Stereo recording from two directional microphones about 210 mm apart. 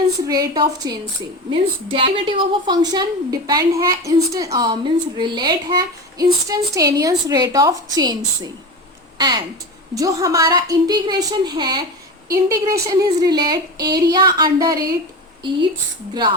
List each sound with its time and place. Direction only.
0.3 s a woman's voice: 20° right (ahead or behind)